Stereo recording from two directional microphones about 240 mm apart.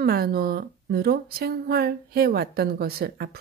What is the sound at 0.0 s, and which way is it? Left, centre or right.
Speech, right.